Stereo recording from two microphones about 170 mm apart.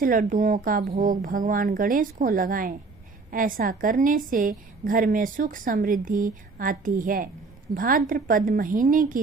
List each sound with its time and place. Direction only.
0.0 s a woman's voice: 55° right (ahead or behind)